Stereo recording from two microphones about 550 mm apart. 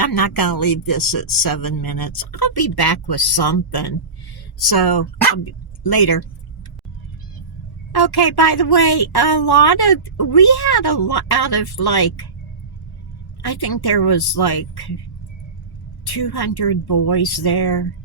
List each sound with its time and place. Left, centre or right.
0.0 s speech: left
7.9 s a woman's voice: left
13.4 s a woman's voice: left
16.1 s a woman's voice: left